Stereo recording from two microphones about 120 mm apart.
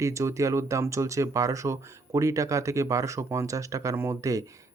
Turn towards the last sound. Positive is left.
turn(degrees=-25)  # may be behind; listen again after turning